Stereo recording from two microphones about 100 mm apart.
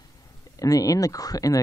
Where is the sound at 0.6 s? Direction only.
35° left (ahead or behind).